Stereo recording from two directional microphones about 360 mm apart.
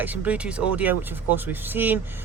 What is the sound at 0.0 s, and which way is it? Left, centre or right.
Speech, centre.